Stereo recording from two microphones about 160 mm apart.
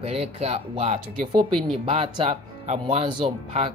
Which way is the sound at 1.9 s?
35° right (ahead or behind).